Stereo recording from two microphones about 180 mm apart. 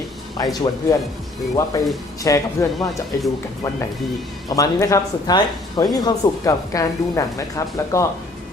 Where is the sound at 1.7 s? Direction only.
20° left (ahead or behind).